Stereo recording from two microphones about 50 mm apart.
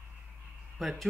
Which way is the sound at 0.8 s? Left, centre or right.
Centre.